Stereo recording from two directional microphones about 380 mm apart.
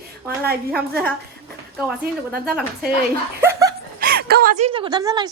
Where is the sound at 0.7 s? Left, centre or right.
Centre.